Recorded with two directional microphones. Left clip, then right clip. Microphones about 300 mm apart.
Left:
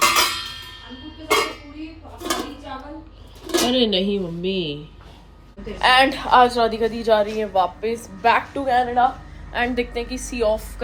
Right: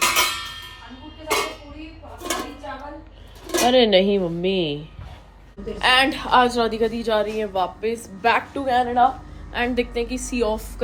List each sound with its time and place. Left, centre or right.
0.0 s music: centre
2.1 s a sound: centre
3.7 s a woman's voice: centre